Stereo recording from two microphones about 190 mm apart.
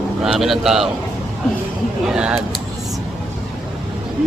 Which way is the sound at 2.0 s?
5° right (ahead or behind).